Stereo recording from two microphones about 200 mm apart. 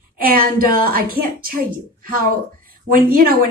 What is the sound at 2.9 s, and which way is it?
Speech, 45° right (ahead or behind).